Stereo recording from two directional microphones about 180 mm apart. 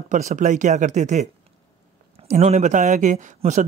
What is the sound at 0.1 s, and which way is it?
Speech, 45° right (ahead or behind).